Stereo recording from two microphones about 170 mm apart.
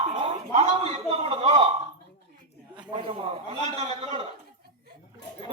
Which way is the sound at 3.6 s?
40° right (ahead or behind).